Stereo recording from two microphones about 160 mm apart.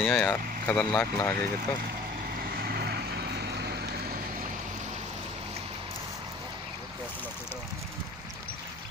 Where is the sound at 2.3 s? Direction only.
70° right (ahead or behind).